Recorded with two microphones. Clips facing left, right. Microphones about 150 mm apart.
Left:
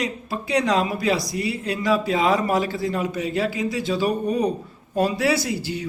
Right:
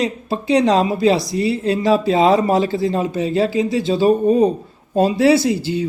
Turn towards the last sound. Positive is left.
turn(degrees=-25)  # may be behind; listen again after turning